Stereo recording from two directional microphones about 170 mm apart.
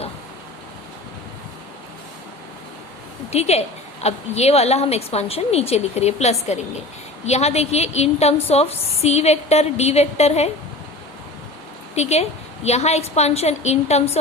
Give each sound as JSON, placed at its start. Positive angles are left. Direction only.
{"t": 3.2, "sound": "a woman's voice", "side_deg": 40}
{"t": 11.9, "sound": "a woman's voice", "side_deg": 40}